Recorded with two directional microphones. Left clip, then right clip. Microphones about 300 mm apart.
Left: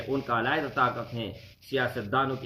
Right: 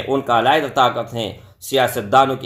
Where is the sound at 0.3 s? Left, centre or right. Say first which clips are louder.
Right 13 dB; centre.